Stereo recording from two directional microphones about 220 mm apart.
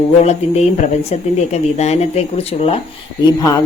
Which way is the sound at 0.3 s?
30° left (ahead or behind).